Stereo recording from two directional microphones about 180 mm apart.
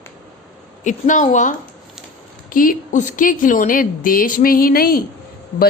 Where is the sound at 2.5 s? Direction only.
50° left (ahead or behind).